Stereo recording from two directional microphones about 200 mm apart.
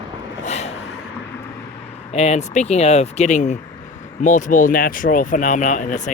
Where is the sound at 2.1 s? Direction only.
30° left (ahead or behind).